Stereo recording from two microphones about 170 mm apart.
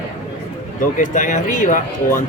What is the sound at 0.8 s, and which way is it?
A man's voice, 50° left (ahead or behind).